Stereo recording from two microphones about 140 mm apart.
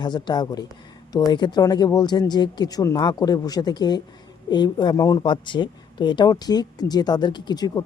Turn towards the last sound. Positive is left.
turn(degrees=30)  # may be behind; listen again after turning